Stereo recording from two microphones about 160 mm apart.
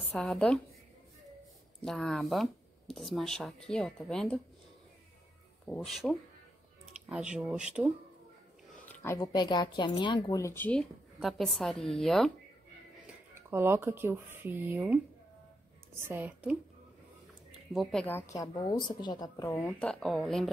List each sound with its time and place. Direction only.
0.0 s a woman's voice: 5° left (ahead or behind)
1.9 s speech: centre (ahead or behind)
5.8 s speech: centre (ahead or behind)
8.8 s a woman's voice: 15° left (ahead or behind)
10.4 s speech: 10° left (ahead or behind)
13.0 s speech: 15° right (ahead or behind)
16.1 s speech: 10° right (ahead or behind)
17.7 s a woman's voice: 5° left (ahead or behind)
19.8 s speech: 5° left (ahead or behind)